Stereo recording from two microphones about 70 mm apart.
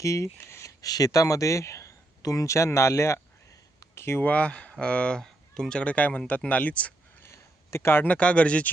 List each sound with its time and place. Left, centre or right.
0.0 s speech: left
0.8 s speech: left
4.2 s speech: centre
7.2 s a sound: left
8.0 s speech: centre